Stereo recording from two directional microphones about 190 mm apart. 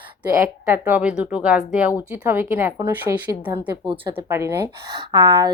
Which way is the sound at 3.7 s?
25° right (ahead or behind).